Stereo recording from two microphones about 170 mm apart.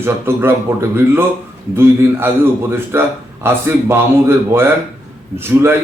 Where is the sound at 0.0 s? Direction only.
15° right (ahead or behind).